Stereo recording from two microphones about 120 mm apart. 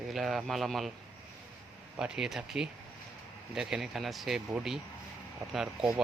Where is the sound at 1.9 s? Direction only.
5° right (ahead or behind).